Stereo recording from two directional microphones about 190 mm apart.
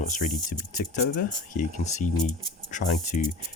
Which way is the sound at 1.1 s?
45° left (ahead or behind).